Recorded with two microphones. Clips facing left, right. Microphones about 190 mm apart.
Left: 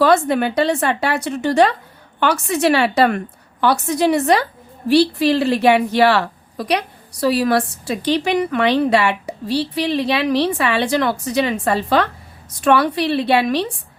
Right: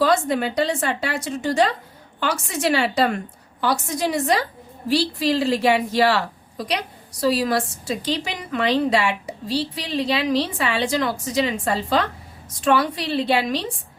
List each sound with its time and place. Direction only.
0.0 s a woman's voice: 65° left (ahead or behind)